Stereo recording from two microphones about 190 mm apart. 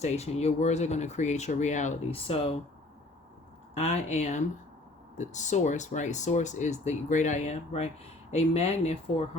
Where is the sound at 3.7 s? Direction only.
35° left (ahead or behind).